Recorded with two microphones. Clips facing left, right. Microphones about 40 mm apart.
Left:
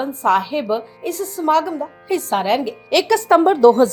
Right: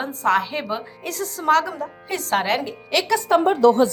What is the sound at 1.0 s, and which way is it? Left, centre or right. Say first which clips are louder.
A woman's voice: left 3 dB; right.